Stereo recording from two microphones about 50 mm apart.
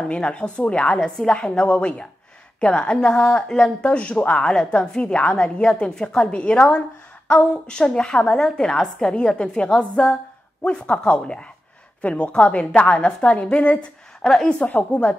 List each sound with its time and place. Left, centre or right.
0.0 s a woman's voice: centre
14.7 s a woman's voice: left